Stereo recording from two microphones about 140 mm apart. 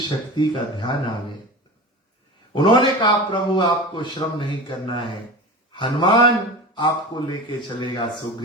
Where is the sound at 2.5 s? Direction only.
35° left (ahead or behind).